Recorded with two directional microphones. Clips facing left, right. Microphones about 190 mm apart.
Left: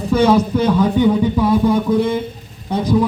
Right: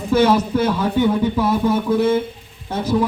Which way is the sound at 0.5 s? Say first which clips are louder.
Left 3 dB; 15° left (ahead or behind).